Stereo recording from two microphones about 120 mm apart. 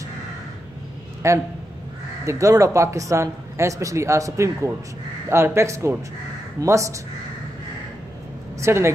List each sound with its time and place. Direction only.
1.2 s speech: 25° right (ahead or behind)
8.5 s speech: 25° right (ahead or behind)